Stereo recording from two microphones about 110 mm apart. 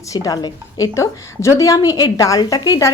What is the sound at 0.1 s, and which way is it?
A woman's voice, 35° left (ahead or behind).